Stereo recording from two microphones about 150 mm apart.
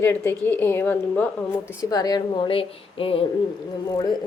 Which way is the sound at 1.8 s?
25° left (ahead or behind).